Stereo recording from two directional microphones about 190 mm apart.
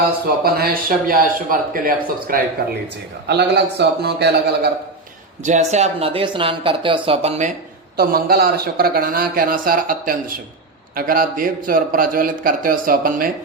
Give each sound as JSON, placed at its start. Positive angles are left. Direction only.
{"t": 0.4, "sound": "speech", "side_deg": -55}
{"t": 3.2, "sound": "a man's voice", "side_deg": -60}
{"t": 5.4, "sound": "speech", "side_deg": -40}
{"t": 7.9, "sound": "speech", "side_deg": -55}